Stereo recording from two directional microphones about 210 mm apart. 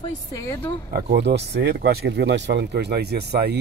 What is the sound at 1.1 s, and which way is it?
Speech, 55° right (ahead or behind).